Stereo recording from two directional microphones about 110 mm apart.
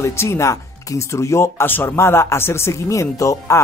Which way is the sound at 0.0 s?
25° left (ahead or behind).